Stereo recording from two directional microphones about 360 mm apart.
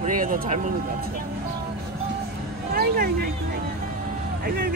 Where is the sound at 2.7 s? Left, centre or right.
Right.